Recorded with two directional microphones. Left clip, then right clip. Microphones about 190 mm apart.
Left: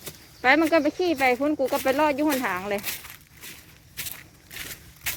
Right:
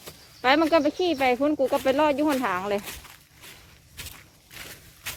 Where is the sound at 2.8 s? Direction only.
55° left (ahead or behind).